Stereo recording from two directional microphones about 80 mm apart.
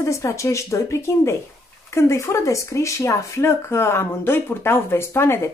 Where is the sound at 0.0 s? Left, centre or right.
Left.